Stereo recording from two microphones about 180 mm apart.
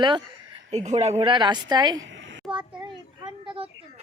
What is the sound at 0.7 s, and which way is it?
A woman's voice, 40° right (ahead or behind).